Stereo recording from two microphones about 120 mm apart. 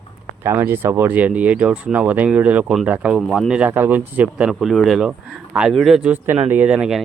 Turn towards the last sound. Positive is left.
turn(degrees=-5)  # may be behind; listen again after turning